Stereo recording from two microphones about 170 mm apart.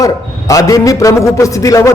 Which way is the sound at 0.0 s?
20° left (ahead or behind).